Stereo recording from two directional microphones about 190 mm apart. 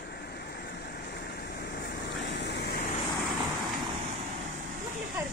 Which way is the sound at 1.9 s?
60° left (ahead or behind).